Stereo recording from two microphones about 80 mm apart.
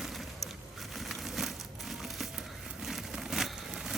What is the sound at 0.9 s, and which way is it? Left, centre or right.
Crushing, centre.